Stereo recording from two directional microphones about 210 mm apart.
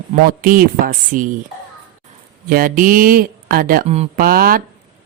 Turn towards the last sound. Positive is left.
turn(degrees=-45)  # may be behind; listen again after turning